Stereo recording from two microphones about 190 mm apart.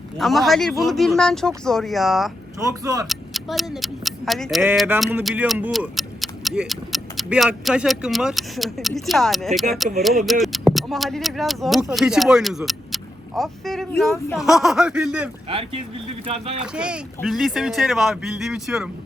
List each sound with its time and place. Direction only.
0.2 s speech: centre (ahead or behind)
2.6 s speech: 20° right (ahead or behind)
3.1 s speech: centre (ahead or behind)
15.4 s speech: 30° right (ahead or behind)
16.6 s speech: 5° right (ahead or behind)